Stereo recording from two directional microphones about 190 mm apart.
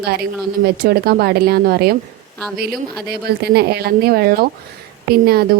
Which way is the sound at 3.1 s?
55° right (ahead or behind).